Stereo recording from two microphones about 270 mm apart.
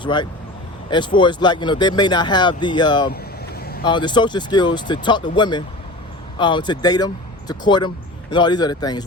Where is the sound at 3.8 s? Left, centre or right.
Centre.